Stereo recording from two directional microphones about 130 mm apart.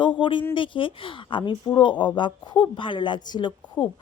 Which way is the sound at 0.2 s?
40° left (ahead or behind).